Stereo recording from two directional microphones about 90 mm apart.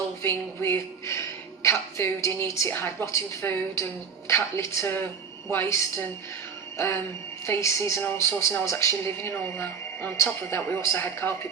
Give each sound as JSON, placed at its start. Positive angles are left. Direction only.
{"t": 0.2, "sound": "a woman's voice", "side_deg": 30}